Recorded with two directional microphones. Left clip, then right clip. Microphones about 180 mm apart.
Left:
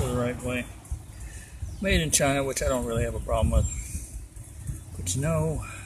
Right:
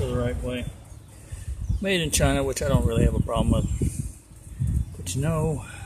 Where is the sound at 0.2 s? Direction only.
5° right (ahead or behind).